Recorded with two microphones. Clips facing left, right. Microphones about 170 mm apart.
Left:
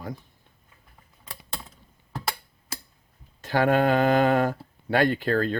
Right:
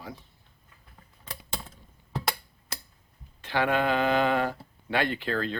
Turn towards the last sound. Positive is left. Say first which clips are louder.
# left 6 dB
turn(degrees=45)  # may be behind; listen again after turning